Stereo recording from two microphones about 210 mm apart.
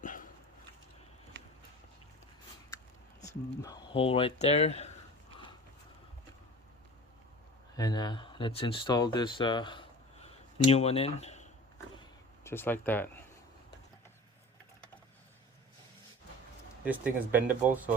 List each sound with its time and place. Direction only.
0.0 s dog: 40° left (ahead or behind)
3.6 s speech: 20° left (ahead or behind)
7.8 s speech: 20° left (ahead or behind)
12.5 s speech: 10° left (ahead or behind)
16.8 s speech: 10° right (ahead or behind)